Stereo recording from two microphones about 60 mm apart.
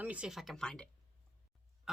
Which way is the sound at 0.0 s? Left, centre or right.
Right.